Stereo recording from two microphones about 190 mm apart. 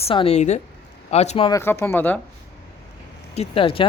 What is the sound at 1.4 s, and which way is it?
Speech, 15° left (ahead or behind).